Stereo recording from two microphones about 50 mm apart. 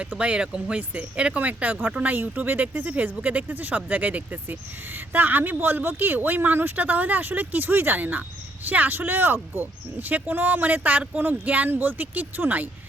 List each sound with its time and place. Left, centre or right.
0.0 s speech: right